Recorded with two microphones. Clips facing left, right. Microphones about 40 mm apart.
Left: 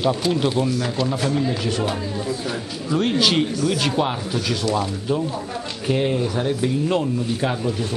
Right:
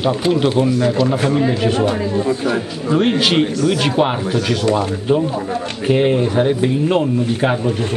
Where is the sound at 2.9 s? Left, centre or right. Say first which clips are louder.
Right 4 dB; right.